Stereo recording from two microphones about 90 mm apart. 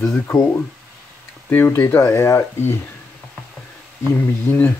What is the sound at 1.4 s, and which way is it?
Speech, 20° left (ahead or behind).